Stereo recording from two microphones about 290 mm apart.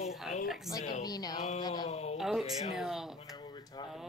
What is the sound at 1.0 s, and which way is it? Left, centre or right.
Speech, centre.